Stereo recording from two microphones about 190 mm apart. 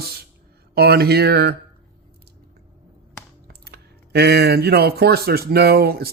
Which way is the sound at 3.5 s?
60° right (ahead or behind).